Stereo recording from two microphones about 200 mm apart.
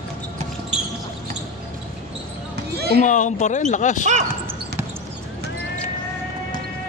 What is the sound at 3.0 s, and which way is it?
Speech, 40° left (ahead or behind).